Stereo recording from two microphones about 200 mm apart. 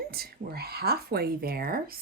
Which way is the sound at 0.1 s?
50° right (ahead or behind).